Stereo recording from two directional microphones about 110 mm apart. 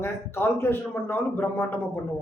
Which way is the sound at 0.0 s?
20° left (ahead or behind).